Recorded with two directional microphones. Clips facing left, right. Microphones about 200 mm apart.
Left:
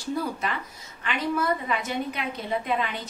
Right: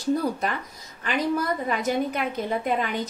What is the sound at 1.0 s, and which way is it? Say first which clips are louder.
A woman's voice: right 1 dB; 40° right (ahead or behind).